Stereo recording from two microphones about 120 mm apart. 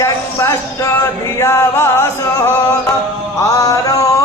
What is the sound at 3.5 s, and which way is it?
Speech, 30° left (ahead or behind).